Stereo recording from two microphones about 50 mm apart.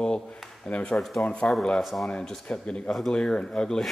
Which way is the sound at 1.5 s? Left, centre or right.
Left.